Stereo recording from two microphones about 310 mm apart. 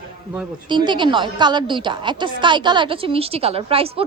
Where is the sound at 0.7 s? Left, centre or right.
Centre.